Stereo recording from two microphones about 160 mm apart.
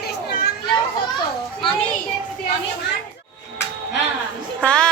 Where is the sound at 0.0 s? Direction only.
85° left.